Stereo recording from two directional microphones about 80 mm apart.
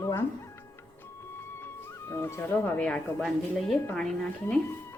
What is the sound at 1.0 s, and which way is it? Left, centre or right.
Music, left.